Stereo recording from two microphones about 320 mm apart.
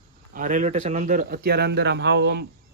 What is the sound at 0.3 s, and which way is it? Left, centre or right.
Speech, right.